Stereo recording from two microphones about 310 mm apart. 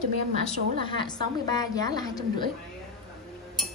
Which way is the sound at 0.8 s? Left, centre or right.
Centre.